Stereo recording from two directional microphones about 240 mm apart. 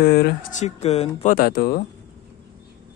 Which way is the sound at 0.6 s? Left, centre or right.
Left.